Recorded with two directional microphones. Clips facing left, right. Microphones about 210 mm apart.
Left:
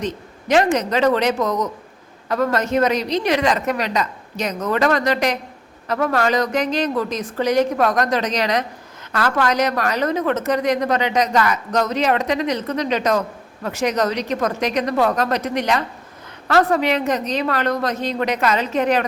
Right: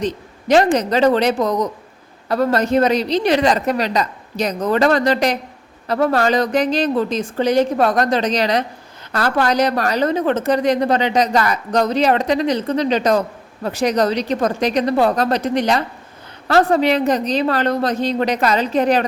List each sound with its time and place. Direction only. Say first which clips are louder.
0.0 s a woman's voice: right 3 dB; 35° right (ahead or behind)